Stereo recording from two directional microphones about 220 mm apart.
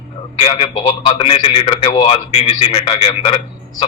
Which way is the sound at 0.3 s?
25° left (ahead or behind).